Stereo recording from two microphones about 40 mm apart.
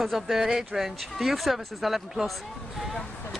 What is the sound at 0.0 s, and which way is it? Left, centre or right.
Speech, centre.